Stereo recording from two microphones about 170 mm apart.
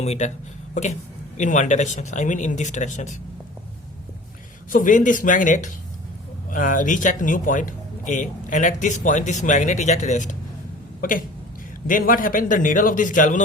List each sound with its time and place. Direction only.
0.0 s speech: 40° left (ahead or behind)
4.7 s speech: 50° left (ahead or behind)
11.9 s speech: 55° left (ahead or behind)